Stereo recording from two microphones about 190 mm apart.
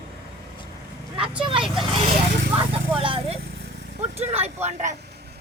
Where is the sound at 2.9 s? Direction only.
30° right (ahead or behind).